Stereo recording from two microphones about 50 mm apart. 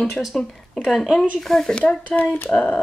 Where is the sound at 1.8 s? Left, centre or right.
Left.